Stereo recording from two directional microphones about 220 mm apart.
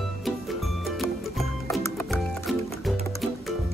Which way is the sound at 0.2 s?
Centre (ahead or behind).